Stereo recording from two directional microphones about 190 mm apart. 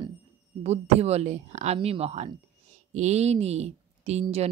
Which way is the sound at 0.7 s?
35° right (ahead or behind).